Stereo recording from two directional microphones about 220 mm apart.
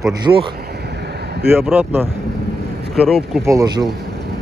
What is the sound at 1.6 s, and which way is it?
Speech, 10° right (ahead or behind).